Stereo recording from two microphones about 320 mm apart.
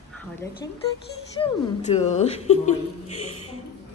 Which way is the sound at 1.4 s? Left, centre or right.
Centre.